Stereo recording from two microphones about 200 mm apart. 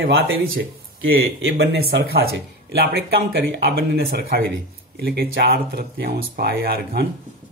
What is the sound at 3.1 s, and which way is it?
Speech, 55° right (ahead or behind).